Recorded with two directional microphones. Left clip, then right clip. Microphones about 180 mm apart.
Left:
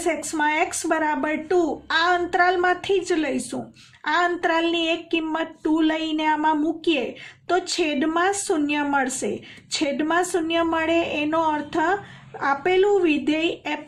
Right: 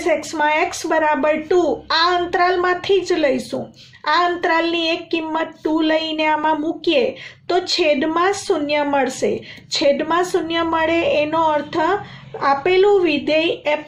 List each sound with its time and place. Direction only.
0.1 s a woman's voice: 45° left (ahead or behind)